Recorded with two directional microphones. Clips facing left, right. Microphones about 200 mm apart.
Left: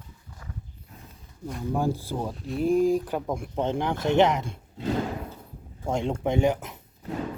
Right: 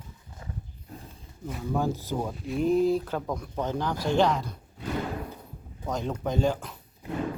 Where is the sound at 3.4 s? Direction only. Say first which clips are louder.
Left 3 dB; 25° left (ahead or behind).